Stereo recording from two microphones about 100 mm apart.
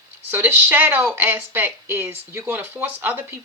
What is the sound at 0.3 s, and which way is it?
Speech, 20° right (ahead or behind).